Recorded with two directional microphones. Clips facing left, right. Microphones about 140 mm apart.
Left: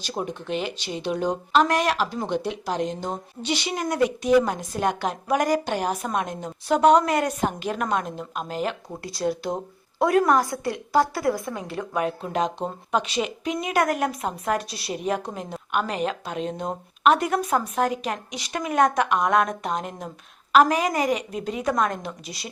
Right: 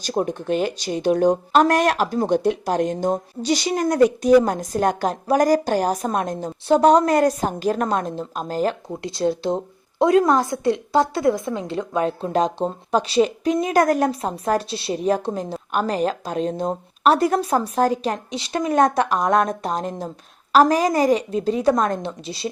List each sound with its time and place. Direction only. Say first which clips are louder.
0.0 s speech: right 7 dB; 40° right (ahead or behind)
9.0 s a woman's voice: right 5 dB; 25° right (ahead or behind)